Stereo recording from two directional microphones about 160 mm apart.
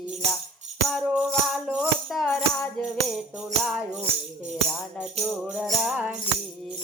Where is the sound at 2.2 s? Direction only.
5° left (ahead or behind).